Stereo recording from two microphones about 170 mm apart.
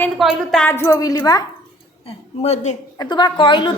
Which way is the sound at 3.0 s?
25° left (ahead or behind).